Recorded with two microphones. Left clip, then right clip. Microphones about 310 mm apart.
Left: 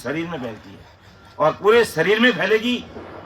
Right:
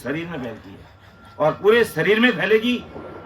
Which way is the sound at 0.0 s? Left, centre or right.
Centre.